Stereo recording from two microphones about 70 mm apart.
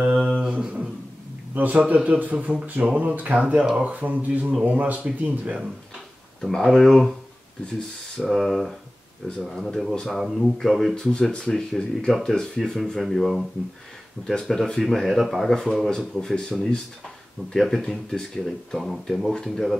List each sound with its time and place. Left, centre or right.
0.0 s a sound: centre
1.5 s a man's voice: right
3.6 s speech: centre
3.9 s speech: right
6.4 s speech: centre
8.2 s speech: centre